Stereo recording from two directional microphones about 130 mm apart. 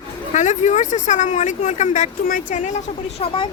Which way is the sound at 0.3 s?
65° left (ahead or behind).